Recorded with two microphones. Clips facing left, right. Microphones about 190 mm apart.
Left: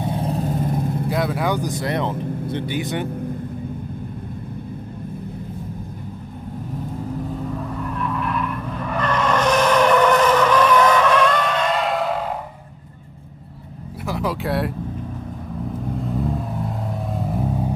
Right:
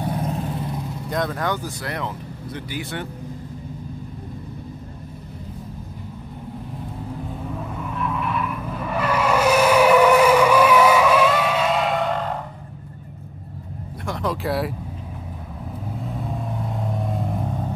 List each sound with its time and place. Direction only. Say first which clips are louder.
0.0 s vehicle: left 2 dB; 30° left (ahead or behind); by 1.0 s 50° left (ahead or behind)
1.0 s speech: even; 5° left (ahead or behind)
7.5 s skidding: left 3 dB; 5° right (ahead or behind)
14.0 s vehicle: left 1 dB; 5° left (ahead or behind)
15.9 s vehicle: left 6 dB; centre (ahead or behind)